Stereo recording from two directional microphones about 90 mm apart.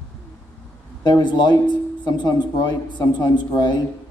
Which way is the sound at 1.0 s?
55° left (ahead or behind).